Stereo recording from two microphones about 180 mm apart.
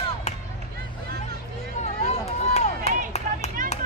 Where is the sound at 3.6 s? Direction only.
45° right (ahead or behind).